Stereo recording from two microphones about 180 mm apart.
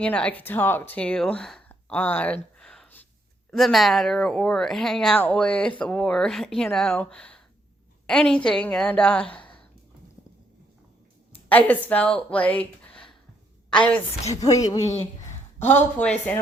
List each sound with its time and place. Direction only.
0.0 s a woman's voice: 5° left (ahead or behind)
11.4 s speech: 10° left (ahead or behind)
12.3 s a sound: 10° left (ahead or behind)
14.4 s a woman's voice: 20° left (ahead or behind)